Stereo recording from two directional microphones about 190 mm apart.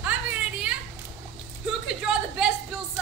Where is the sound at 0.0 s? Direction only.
5° right (ahead or behind).